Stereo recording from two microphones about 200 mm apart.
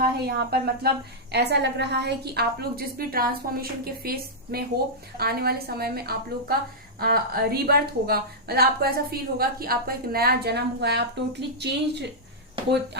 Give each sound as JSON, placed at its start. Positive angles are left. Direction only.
{"t": 0.0, "sound": "a woman's voice", "side_deg": -50}
{"t": 5.1, "sound": "a woman's voice", "side_deg": -50}